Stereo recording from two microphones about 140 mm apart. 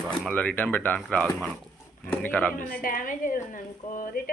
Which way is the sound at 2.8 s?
85° left.